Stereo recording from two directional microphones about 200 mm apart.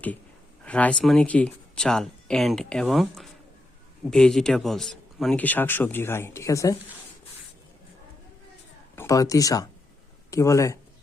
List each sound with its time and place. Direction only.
0.6 s speech: 5° left (ahead or behind)
9.0 s speech: 15° left (ahead or behind)